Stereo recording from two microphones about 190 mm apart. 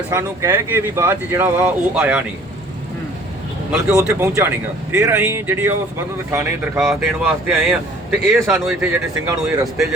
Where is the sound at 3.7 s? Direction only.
15° right (ahead or behind).